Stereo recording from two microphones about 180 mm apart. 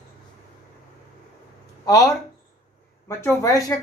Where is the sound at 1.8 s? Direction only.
20° left (ahead or behind).